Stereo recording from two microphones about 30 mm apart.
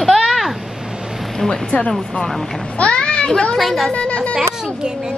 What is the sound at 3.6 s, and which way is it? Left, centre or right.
Speech, centre.